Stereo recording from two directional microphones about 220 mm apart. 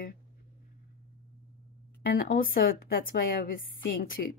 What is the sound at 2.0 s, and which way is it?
A woman's voice, 40° left (ahead or behind).